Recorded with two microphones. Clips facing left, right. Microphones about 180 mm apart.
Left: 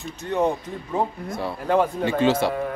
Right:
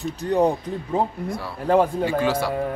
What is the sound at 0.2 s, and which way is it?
Speech, 35° right (ahead or behind).